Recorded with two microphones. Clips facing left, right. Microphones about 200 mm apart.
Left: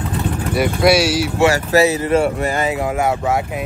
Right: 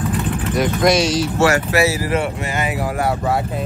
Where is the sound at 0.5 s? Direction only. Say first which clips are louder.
Left 2 dB; 10° left (ahead or behind).